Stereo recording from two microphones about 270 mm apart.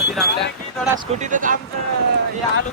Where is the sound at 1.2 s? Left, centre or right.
Right.